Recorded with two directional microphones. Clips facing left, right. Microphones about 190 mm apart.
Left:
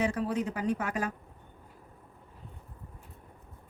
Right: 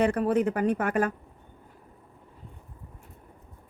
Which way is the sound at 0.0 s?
55° right (ahead or behind).